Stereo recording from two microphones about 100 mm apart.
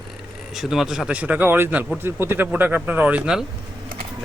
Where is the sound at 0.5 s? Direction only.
5° right (ahead or behind).